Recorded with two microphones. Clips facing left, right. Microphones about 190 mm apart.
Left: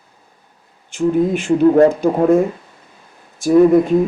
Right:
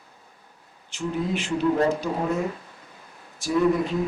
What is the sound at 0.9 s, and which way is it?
Speech, 50° left (ahead or behind).